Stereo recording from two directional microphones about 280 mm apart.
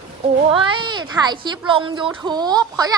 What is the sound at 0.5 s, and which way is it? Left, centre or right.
A child's voice, centre.